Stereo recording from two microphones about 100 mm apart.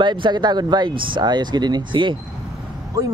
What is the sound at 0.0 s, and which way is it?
Speech, 50° right (ahead or behind).